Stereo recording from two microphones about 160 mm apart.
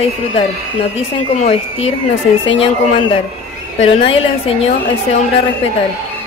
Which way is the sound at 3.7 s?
35° left (ahead or behind).